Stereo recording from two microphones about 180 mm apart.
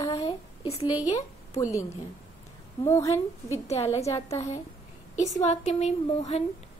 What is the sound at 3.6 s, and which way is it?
Speech, 35° left (ahead or behind).